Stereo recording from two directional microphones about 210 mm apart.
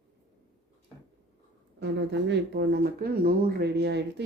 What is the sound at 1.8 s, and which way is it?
Speech, 55° right (ahead or behind).